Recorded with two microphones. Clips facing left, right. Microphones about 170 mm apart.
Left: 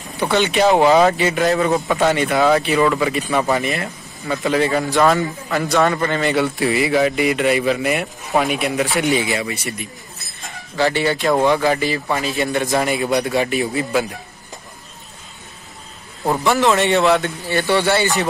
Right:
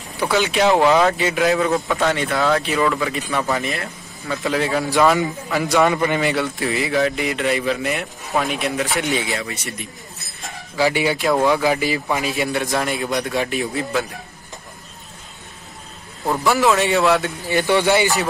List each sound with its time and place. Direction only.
0.3 s a man's voice: centre (ahead or behind)
6.3 s a man's voice: 5° left (ahead or behind)
9.4 s a sound: 10° left (ahead or behind)
10.9 s a man's voice: 10° right (ahead or behind)
16.4 s speech: 5° right (ahead or behind)
17.5 s a man's voice: 15° right (ahead or behind)